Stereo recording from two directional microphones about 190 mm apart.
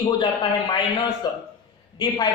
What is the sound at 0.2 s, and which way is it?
A man's voice, 20° left (ahead or behind).